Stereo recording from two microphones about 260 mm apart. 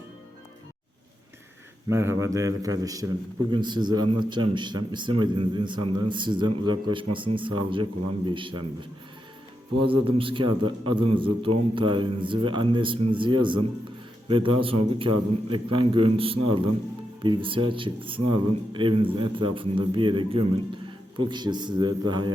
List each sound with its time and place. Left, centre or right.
1.9 s a man's voice: centre
9.8 s a man's voice: right